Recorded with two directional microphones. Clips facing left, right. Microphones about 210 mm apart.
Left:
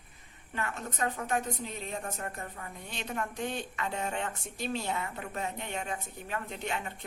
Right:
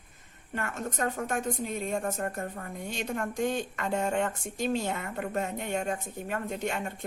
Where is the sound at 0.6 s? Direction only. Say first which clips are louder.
Right 2 dB; 45° right (ahead or behind).